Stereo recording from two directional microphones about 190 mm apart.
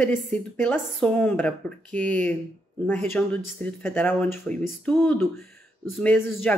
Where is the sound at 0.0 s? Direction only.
5° left (ahead or behind).